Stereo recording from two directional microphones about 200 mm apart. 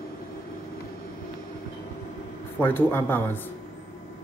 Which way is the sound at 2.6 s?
10° left (ahead or behind).